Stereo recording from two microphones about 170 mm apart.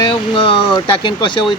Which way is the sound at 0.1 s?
30° left (ahead or behind).